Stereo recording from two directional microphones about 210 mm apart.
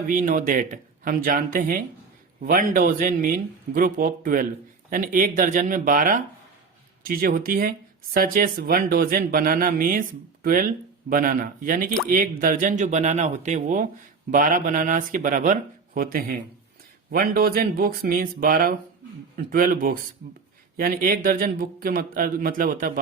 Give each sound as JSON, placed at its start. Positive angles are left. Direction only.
{"t": 0.1, "sound": "a man's voice", "side_deg": -40}